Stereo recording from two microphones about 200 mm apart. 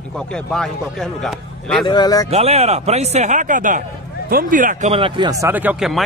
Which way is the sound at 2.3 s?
30° right (ahead or behind).